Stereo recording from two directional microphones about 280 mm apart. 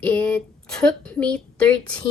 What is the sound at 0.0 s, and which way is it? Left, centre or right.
A woman's voice, centre.